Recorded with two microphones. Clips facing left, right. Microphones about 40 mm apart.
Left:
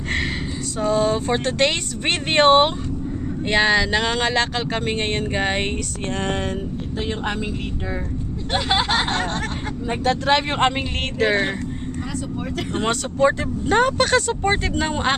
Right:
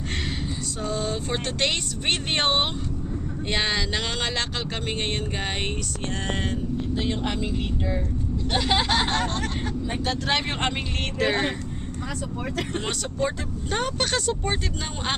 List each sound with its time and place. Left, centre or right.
1.1 s speech: left
3.4 s speech: left
6.2 s speech: left
7.0 s speech: left
9.9 s speech: left
10.2 s speech: left
11.2 s speech: left
13.1 s speech: left
14.2 s speech: left